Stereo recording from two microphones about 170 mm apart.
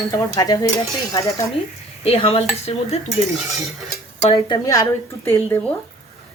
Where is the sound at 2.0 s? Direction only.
35° left (ahead or behind).